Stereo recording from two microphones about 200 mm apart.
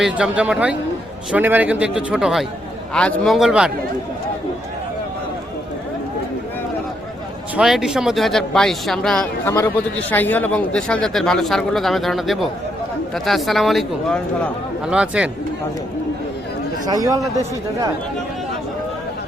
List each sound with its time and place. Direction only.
0.0 s a man's voice: 5° right (ahead or behind)
7.5 s a man's voice: centre (ahead or behind)
16.8 s speech: 20° right (ahead or behind)